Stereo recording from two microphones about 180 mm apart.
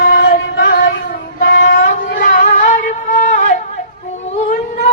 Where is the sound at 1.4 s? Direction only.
75° left (ahead or behind).